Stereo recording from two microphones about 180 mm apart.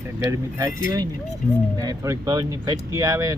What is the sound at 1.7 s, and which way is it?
Speech, 20° right (ahead or behind).